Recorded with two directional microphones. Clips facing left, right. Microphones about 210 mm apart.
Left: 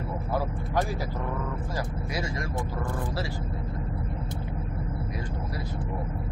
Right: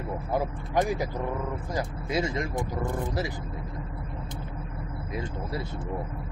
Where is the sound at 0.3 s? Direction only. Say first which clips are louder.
Right 1 dB; 20° right (ahead or behind).